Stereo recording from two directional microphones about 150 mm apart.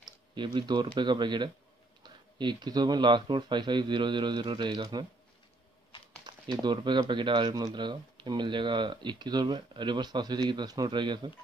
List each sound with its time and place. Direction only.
0.0 s speech: 30° right (ahead or behind)
6.6 s speech: 30° right (ahead or behind)